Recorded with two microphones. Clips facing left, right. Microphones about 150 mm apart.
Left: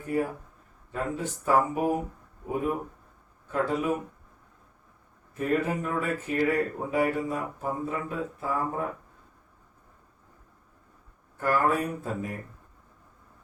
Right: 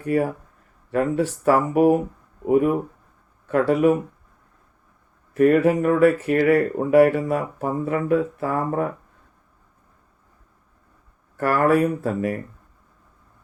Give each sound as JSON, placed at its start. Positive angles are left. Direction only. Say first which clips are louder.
{"t": 0.0, "sound": "speech", "louder": "right 7 dB", "side_deg": -75}
{"t": 5.3, "sound": "speech", "louder": "right 11 dB", "side_deg": -75}
{"t": 11.3, "sound": "speech", "louder": "right 7 dB", "side_deg": -75}